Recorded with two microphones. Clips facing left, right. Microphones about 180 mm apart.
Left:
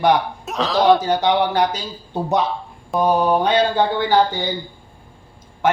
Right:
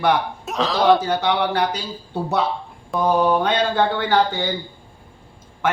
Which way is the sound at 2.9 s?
Centre (ahead or behind).